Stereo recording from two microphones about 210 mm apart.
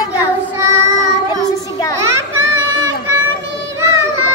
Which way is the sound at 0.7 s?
15° right (ahead or behind).